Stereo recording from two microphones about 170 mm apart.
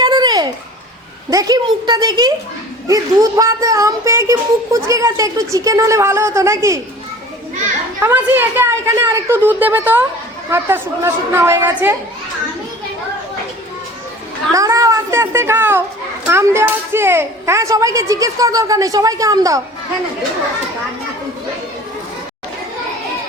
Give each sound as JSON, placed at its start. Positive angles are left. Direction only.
{"t": 0.0, "sound": "a sound", "side_deg": -25}
{"t": 1.3, "sound": "speech", "side_deg": -20}
{"t": 8.0, "sound": "speech", "side_deg": -10}
{"t": 14.5, "sound": "speech", "side_deg": -20}